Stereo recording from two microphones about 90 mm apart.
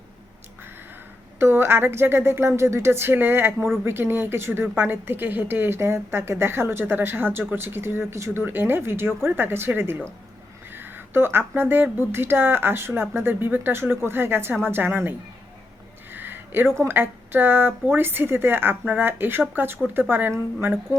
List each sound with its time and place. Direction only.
1.4 s speech: 25° right (ahead or behind)
16.1 s speech: 25° right (ahead or behind)